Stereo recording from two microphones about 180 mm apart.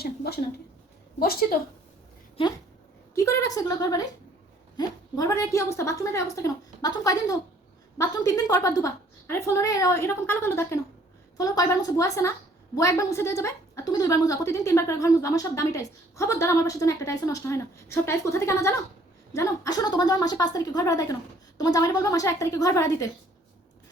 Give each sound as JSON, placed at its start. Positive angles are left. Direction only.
{"t": 0.0, "sound": "a sound", "side_deg": 60}
{"t": 1.2, "sound": "a woman's voice", "side_deg": 55}
{"t": 3.2, "sound": "a woman's voice", "side_deg": 15}